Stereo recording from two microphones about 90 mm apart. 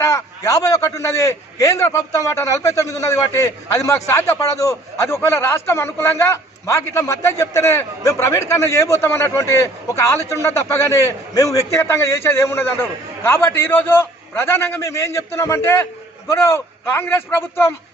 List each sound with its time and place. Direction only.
0.0 s a man's voice: 35° left (ahead or behind)